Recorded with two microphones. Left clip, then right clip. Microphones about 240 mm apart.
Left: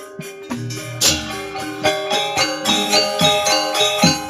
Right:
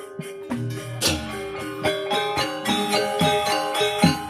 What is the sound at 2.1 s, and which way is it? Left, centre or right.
Music, left.